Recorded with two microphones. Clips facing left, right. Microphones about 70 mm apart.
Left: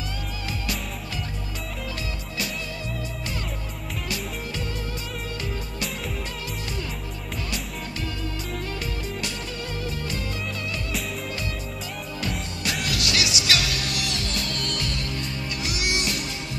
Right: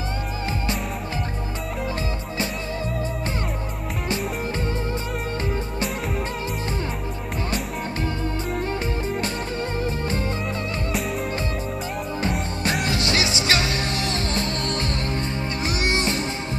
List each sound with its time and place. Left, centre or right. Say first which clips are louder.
9.8 s music: right 5 dB; right
12.2 s music: right 4 dB; right